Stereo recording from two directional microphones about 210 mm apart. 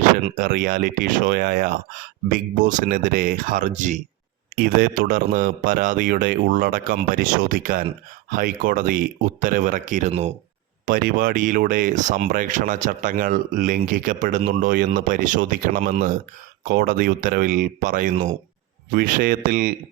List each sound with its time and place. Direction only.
0.3 s speech: 40° right (ahead or behind)
18.9 s speech: 45° right (ahead or behind)